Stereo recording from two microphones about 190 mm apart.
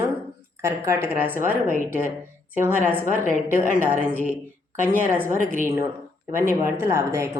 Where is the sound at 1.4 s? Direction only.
45° left (ahead or behind).